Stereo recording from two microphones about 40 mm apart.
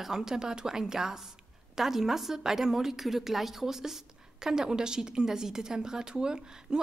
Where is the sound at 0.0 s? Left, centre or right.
Centre.